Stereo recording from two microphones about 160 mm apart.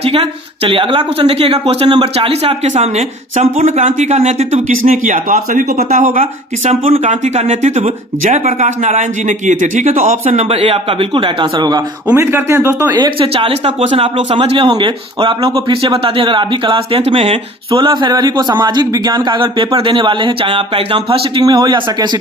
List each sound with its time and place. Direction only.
0.0 s speech: 40° right (ahead or behind); by 6.2 s 55° right (ahead or behind)
6.7 s speech: 40° right (ahead or behind)
17.7 s a man's voice: 30° right (ahead or behind)